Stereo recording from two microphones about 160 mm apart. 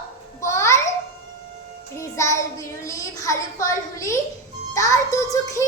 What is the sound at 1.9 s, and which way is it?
Child singing, 20° left (ahead or behind).